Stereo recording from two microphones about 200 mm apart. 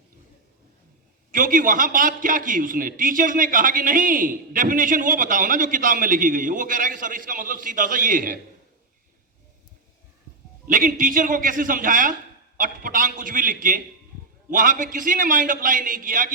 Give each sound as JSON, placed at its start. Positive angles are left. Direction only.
{"t": 1.3, "sound": "a man's voice", "side_deg": -40}
{"t": 10.7, "sound": "a man's voice", "side_deg": -40}